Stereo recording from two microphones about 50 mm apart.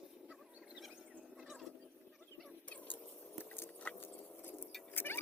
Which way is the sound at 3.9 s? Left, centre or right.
Left.